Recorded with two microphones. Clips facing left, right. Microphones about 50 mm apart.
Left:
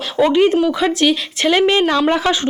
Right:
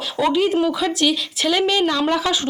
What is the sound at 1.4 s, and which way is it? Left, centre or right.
Speech, left.